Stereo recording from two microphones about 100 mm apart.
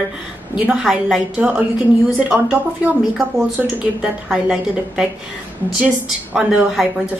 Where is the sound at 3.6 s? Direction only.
10° right (ahead or behind).